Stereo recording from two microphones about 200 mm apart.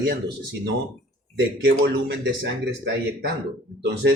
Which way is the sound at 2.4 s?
60° right (ahead or behind).